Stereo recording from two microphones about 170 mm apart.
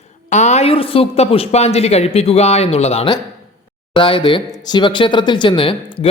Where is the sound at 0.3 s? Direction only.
45° left (ahead or behind).